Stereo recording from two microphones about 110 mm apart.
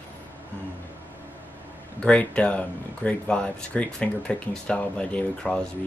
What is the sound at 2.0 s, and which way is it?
Speech, 10° left (ahead or behind).